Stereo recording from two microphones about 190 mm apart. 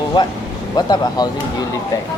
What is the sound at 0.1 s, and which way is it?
Speech, 25° left (ahead or behind).